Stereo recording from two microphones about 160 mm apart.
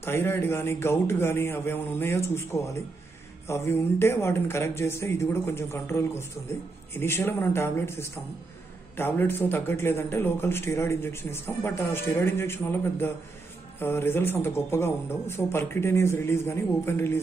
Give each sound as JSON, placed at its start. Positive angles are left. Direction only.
{"t": 0.0, "sound": "a man's voice", "side_deg": 15}